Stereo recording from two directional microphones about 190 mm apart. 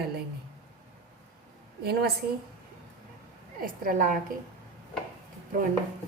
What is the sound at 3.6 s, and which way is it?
Speech, 45° right (ahead or behind).